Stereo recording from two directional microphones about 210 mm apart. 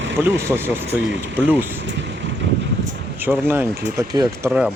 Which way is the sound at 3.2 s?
10° right (ahead or behind).